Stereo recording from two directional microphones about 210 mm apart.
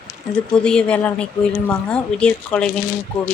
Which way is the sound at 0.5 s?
5° left (ahead or behind).